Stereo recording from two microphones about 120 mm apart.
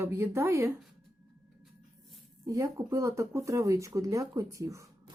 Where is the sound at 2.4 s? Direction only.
25° right (ahead or behind).